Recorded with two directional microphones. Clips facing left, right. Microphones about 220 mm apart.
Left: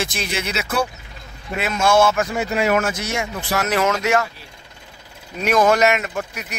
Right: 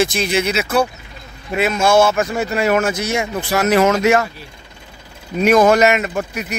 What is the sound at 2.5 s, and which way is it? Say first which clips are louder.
Speech: right 2 dB; 15° left (ahead or behind).